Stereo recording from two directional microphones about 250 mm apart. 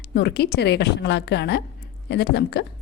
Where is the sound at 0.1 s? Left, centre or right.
Left.